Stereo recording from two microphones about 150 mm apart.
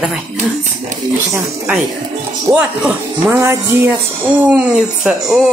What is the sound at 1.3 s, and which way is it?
Speech, 15° right (ahead or behind).